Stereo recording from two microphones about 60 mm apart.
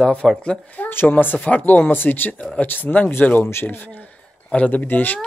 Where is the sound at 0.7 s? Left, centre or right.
Left.